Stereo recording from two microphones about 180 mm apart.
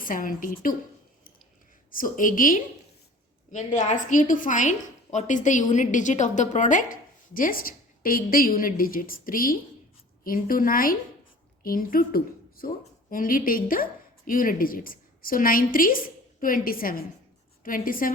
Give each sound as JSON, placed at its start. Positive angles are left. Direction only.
{"t": 0.0, "sound": "a woman's voice", "side_deg": 50}
{"t": 1.9, "sound": "a woman's voice", "side_deg": 50}
{"t": 3.8, "sound": "a woman's voice", "side_deg": 45}